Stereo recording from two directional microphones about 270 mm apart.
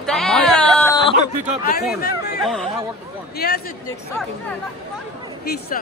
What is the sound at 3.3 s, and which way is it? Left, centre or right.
Speech, left.